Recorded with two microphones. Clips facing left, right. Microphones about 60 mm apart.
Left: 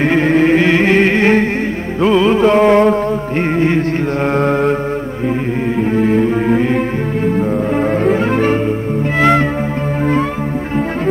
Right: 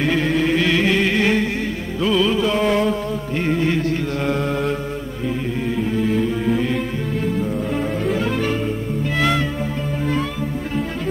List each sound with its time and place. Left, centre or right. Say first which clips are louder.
0.0 s music: left 7 dB; left
4.3 s mantra: left 8 dB; left
5.8 s music: left 7 dB; left